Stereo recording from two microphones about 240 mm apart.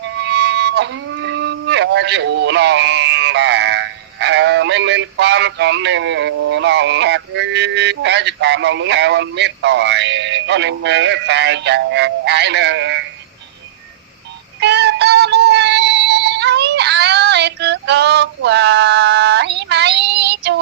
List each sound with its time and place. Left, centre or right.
0.0 s speech: right
14.6 s synthetic singing: right